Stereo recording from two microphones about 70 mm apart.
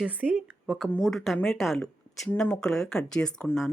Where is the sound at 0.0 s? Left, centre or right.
Right.